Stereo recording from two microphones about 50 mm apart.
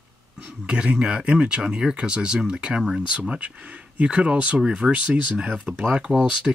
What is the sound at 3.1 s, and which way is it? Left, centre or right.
Speech, right.